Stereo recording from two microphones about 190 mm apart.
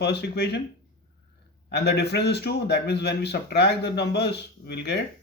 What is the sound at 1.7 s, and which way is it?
Speech, 60° left (ahead or behind).